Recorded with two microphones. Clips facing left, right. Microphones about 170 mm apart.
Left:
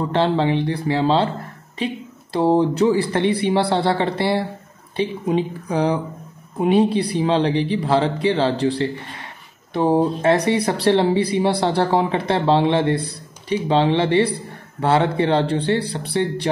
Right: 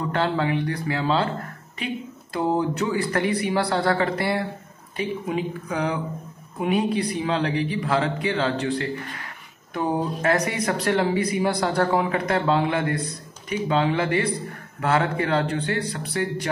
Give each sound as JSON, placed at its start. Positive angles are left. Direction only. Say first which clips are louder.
{"t": 0.0, "sound": "speech", "louder": "left 5 dB", "side_deg": 30}